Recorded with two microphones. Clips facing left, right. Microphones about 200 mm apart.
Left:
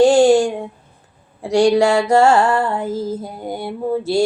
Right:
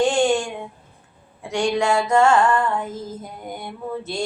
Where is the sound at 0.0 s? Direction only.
35° left (ahead or behind).